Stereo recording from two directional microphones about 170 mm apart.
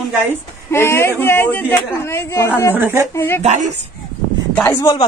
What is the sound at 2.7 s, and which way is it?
Speech, 15° right (ahead or behind).